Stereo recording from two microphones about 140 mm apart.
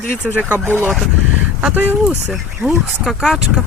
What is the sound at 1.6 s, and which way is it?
Speech, 10° right (ahead or behind).